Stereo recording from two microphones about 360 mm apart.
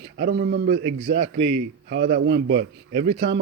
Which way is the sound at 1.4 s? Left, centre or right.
Right.